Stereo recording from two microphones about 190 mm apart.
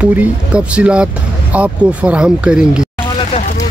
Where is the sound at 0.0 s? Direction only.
5° right (ahead or behind).